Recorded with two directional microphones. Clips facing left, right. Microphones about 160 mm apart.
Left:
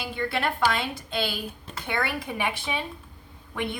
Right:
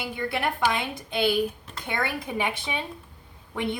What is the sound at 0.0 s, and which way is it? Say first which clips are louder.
A woman's voice: even; 15° right (ahead or behind).